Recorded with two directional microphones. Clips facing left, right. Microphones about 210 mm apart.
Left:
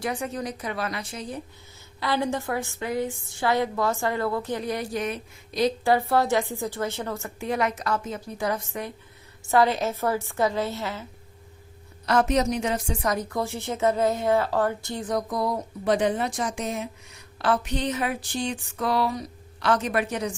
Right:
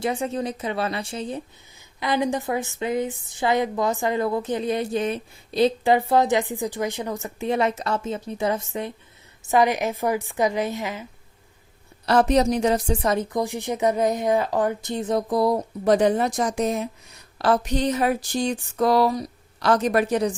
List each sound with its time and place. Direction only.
0.0 s a woman's voice: 25° right (ahead or behind)
2.0 s a woman's voice: 15° right (ahead or behind)
12.0 s a woman's voice: 35° right (ahead or behind)